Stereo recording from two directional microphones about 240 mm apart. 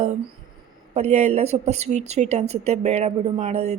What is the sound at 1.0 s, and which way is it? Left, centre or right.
A woman's voice, right.